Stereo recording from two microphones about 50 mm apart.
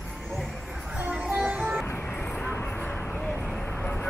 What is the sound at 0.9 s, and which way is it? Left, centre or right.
Music, right.